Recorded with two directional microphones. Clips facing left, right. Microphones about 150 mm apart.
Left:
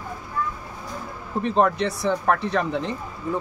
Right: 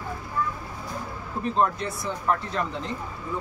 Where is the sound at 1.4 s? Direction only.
70° left (ahead or behind).